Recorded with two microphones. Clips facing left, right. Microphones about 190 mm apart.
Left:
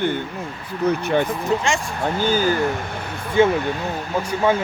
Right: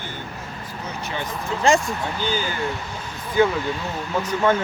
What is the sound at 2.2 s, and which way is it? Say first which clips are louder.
Speech: left 8 dB; 45° left (ahead or behind).